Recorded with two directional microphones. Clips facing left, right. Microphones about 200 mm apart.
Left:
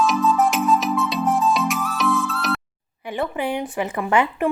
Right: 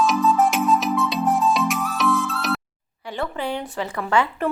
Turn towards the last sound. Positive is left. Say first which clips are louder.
# left 2 dB
turn(degrees=15)  # may be behind; listen again after turning